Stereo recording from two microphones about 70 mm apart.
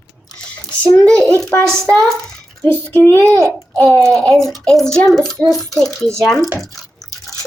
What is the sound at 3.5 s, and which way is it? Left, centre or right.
Speech, left.